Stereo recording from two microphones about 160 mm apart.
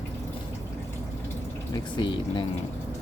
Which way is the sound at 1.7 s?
30° left (ahead or behind).